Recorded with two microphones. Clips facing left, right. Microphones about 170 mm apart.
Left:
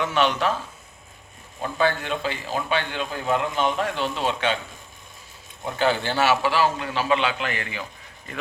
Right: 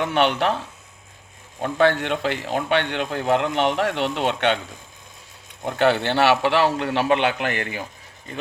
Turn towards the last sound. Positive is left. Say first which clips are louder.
# right 4 dB
turn(degrees=-45)  # may be behind; listen again after turning